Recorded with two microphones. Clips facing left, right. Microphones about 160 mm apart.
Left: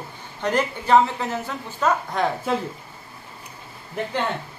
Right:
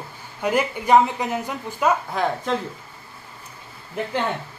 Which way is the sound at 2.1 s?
5° left (ahead or behind).